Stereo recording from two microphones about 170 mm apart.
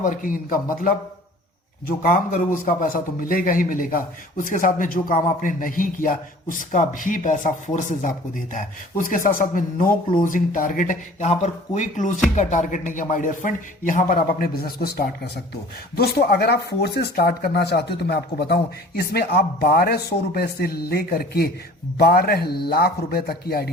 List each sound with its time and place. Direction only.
0.0 s a man's voice: 55° left (ahead or behind)
2.0 s a man's voice: 55° left (ahead or behind)